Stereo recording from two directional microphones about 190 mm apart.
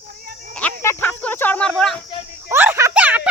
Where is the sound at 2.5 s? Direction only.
10° right (ahead or behind).